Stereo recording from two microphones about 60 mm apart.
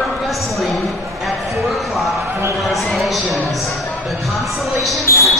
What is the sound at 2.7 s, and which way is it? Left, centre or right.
Speech, centre.